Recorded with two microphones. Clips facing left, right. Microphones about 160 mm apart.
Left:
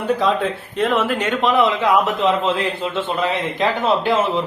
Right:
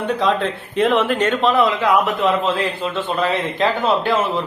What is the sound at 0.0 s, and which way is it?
Speech, centre (ahead or behind).